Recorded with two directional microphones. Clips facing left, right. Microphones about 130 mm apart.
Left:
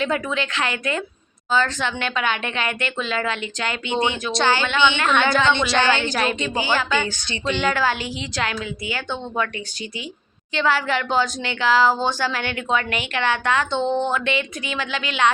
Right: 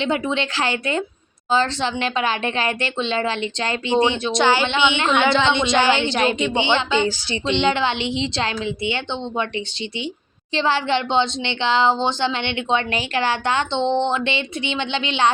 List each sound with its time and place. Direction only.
0.0 s a woman's voice: 25° right (ahead or behind)
10.5 s a woman's voice: 30° right (ahead or behind)